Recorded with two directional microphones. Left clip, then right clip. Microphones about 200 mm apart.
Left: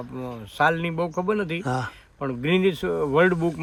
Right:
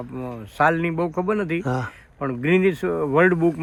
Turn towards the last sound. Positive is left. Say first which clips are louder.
# right 2 dB
turn(degrees=15)  # may be behind; listen again after turning